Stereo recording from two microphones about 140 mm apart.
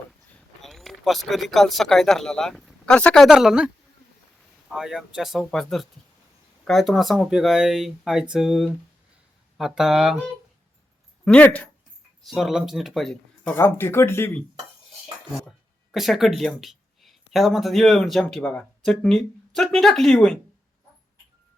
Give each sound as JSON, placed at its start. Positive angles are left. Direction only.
{"t": 0.3, "sound": "speech", "side_deg": 0}
{"t": 3.2, "sound": "speech", "side_deg": -5}
{"t": 11.3, "sound": "speech", "side_deg": 10}
{"t": 12.2, "sound": "speech", "side_deg": 0}
{"t": 13.5, "sound": "speech", "side_deg": 15}
{"t": 15.4, "sound": "a sound", "side_deg": 0}
{"t": 16.4, "sound": "speech", "side_deg": 0}